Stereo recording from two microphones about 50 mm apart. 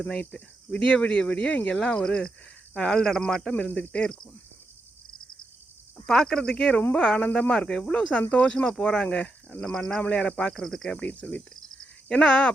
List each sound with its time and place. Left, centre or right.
0.2 s speech: left
6.1 s speech: centre; by 8.5 s left
8.5 s speech: centre
10.5 s cricket: centre
10.9 s speech: left
12.0 s speech: centre